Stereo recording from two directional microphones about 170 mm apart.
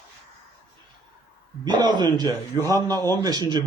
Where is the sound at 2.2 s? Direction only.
15° left (ahead or behind).